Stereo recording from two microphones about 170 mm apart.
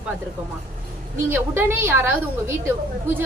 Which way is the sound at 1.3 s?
15° right (ahead or behind).